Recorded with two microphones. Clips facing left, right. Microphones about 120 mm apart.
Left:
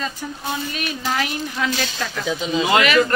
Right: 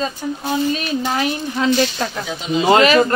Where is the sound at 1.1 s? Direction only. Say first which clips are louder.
Right 4 dB; 35° right (ahead or behind).